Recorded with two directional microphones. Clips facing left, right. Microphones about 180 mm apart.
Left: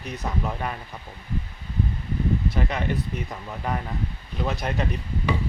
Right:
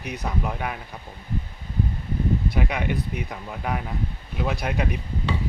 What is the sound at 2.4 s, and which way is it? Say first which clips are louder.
Speech: right 1 dB; 10° right (ahead or behind).